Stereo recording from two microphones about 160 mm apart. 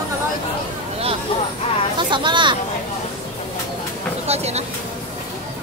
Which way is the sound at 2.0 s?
30° right (ahead or behind).